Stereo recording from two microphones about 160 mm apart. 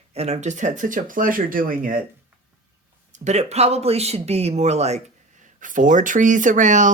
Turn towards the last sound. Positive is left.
turn(degrees=-50)  # may be behind; listen again after turning